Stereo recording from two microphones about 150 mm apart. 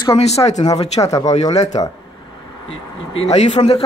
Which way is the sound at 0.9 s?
20° left (ahead or behind).